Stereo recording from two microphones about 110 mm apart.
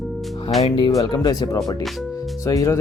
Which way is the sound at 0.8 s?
35° left (ahead or behind).